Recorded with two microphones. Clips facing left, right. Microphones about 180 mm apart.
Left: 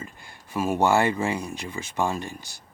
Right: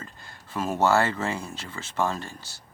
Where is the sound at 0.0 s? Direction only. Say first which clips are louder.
Left 3 dB; 15° left (ahead or behind).